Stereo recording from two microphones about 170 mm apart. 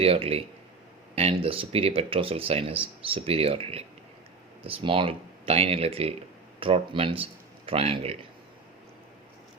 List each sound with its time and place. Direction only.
0.0 s speech: 35° right (ahead or behind)